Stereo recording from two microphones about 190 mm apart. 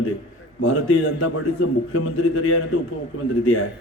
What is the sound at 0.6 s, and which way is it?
A man's voice, 90° left.